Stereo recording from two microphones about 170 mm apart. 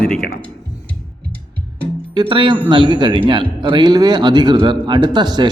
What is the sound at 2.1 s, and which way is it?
Speech, 25° right (ahead or behind).